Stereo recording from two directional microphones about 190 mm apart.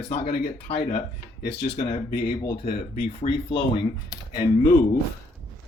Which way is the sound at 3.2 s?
40° left (ahead or behind).